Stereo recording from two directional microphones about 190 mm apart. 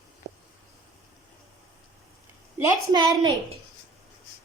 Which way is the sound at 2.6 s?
20° right (ahead or behind).